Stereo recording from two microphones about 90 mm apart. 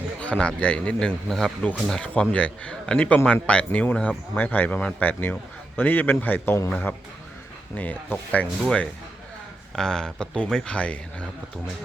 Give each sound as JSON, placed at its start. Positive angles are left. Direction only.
{"t": 0.2, "sound": "a man's voice", "side_deg": 10}